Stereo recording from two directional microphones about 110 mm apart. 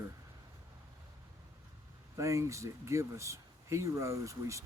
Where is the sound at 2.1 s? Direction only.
30° right (ahead or behind).